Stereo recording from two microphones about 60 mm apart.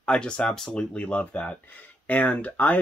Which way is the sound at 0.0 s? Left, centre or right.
Centre.